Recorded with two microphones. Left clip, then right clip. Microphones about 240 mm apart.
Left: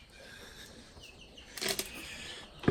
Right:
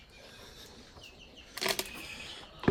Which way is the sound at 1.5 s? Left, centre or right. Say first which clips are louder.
Right 3 dB; right.